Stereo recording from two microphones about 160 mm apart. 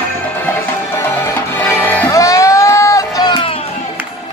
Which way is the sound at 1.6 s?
10° left (ahead or behind).